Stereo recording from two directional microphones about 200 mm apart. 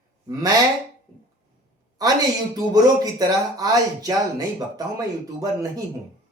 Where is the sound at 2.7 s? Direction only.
20° right (ahead or behind).